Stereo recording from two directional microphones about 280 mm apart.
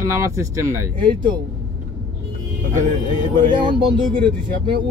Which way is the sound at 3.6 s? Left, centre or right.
Centre.